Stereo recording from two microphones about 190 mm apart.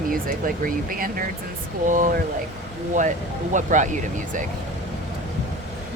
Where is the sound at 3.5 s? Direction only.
40° right (ahead or behind).